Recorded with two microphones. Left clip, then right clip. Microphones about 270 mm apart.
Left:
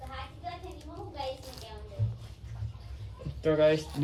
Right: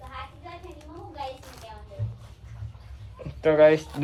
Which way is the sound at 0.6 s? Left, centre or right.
Centre.